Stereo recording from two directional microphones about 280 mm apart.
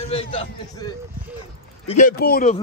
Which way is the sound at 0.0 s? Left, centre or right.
Left.